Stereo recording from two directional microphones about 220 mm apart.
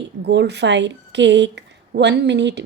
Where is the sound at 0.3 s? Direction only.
50° right (ahead or behind).